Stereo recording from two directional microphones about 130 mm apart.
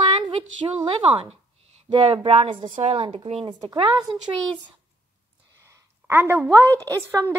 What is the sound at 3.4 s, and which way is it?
Speech, 35° right (ahead or behind).